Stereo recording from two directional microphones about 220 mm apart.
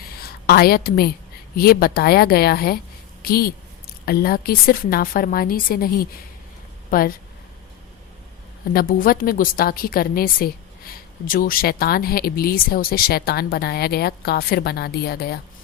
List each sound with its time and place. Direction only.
0.2 s a woman's voice: 45° left (ahead or behind)
8.7 s a woman's voice: 40° left (ahead or behind)